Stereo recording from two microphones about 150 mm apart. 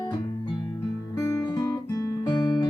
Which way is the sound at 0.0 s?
30° left (ahead or behind).